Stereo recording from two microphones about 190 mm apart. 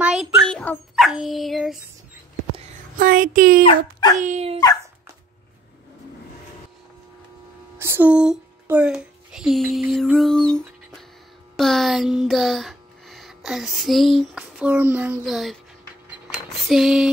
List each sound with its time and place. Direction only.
0.0 s speech: 5° right (ahead or behind)
3.0 s speech: 50° right (ahead or behind)
3.6 s speech: 20° left (ahead or behind)
4.2 s speech: 35° right (ahead or behind)
7.8 s a child's voice: 10° right (ahead or behind)
16.1 s a sound: centre (ahead or behind)